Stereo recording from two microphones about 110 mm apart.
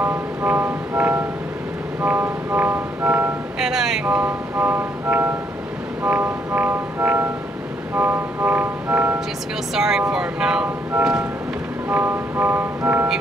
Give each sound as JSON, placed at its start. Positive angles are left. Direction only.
{"t": 0.0, "sound": "music", "side_deg": -15}
{"t": 3.5, "sound": "music", "side_deg": -5}
{"t": 9.8, "sound": "music", "side_deg": -5}